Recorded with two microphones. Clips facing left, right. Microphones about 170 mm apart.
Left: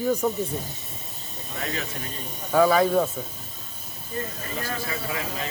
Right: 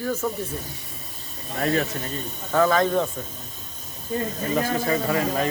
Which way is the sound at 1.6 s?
45° right (ahead or behind).